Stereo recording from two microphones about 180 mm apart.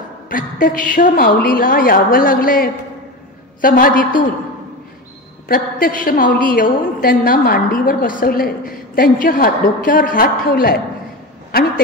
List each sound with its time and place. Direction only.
0.3 s a woman's voice: 50° left (ahead or behind)
5.5 s a woman's voice: 50° left (ahead or behind)